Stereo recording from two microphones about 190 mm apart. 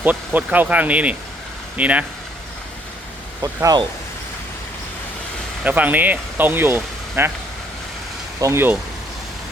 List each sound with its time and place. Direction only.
0.0 s speech: 10° right (ahead or behind)
3.4 s speech: 20° right (ahead or behind)
5.6 s speech: 10° right (ahead or behind)
8.4 s speech: 15° right (ahead or behind)